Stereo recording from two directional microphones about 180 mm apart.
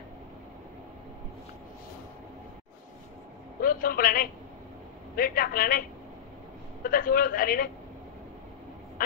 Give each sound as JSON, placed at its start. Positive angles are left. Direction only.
{"t": 3.6, "sound": "a man's voice", "side_deg": 55}